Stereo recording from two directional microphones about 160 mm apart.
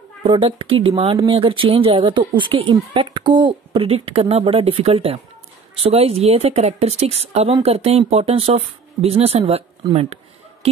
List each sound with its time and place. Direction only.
0.2 s speech: 35° right (ahead or behind)